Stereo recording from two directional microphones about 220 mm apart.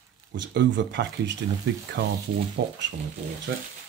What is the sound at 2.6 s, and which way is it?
Speech, 50° right (ahead or behind).